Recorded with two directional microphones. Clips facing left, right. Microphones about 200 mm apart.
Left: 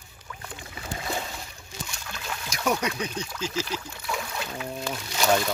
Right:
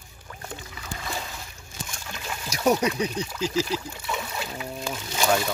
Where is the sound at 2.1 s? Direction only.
10° right (ahead or behind).